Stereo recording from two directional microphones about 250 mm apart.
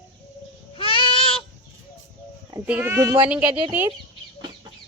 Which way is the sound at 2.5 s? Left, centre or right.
Centre.